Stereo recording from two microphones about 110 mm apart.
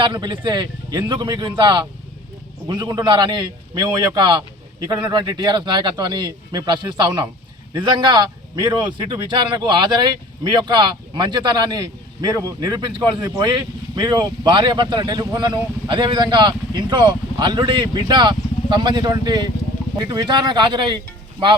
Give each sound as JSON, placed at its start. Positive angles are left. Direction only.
{"t": 0.0, "sound": "a man's voice", "side_deg": -45}